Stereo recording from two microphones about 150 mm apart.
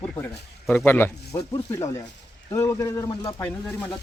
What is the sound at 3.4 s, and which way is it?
Speech, 10° left (ahead or behind).